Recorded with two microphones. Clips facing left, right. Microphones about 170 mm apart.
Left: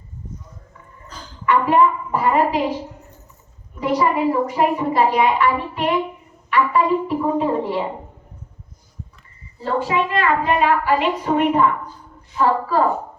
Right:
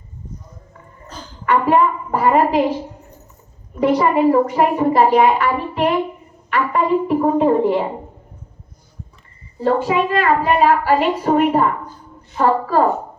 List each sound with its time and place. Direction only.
1.5 s a woman's voice: 50° right (ahead or behind)
3.8 s a woman's voice: 50° right (ahead or behind)
9.6 s a woman's voice: 50° right (ahead or behind)